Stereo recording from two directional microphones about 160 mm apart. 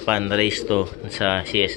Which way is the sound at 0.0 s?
10° right (ahead or behind).